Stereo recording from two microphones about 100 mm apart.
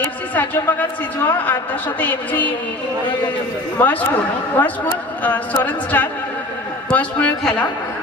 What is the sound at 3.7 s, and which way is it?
Speech, 15° left (ahead or behind).